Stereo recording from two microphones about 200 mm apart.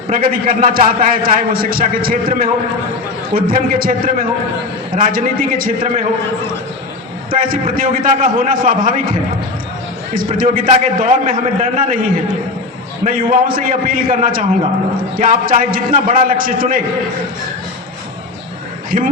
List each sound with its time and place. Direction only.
0.1 s a man's voice: 45° right (ahead or behind)
7.3 s a man's voice: 45° right (ahead or behind)
10.3 s a man's voice: 40° right (ahead or behind)
18.9 s a man's voice: 45° right (ahead or behind)